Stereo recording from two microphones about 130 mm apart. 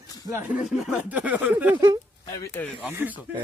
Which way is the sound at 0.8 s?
10° right (ahead or behind).